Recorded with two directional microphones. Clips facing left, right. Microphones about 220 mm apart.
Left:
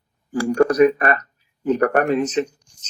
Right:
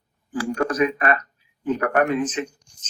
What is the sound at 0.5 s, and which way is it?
Speech, 40° left (ahead or behind).